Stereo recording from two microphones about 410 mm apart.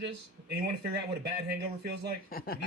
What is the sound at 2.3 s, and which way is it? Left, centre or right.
Speech, left.